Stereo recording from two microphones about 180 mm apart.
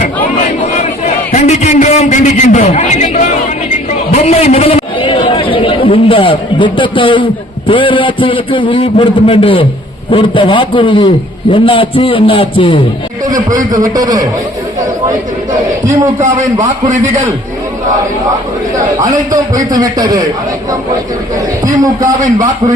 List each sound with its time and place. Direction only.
0.8 s a sound: 40° left (ahead or behind)
7.7 s a man's voice: 30° left (ahead or behind)
13.2 s a sound: 20° right (ahead or behind)
13.7 s a man's voice: 20° right (ahead or behind)
16.6 s a man's voice: 45° right (ahead or behind)
18.9 s a man's voice: 20° right (ahead or behind)
21.8 s a man's voice: 20° right (ahead or behind)